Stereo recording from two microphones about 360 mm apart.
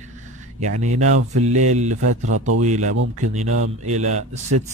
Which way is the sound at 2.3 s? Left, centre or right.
Right.